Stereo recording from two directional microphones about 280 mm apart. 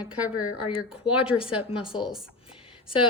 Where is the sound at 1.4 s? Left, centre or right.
Centre.